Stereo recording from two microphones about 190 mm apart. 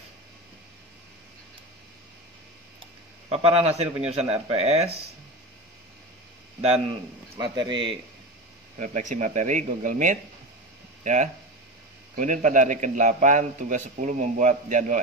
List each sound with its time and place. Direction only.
3.3 s a man's voice: 30° right (ahead or behind)
7.3 s speech: 20° right (ahead or behind)
8.7 s a man's voice: 40° right (ahead or behind)
12.2 s a man's voice: 40° right (ahead or behind)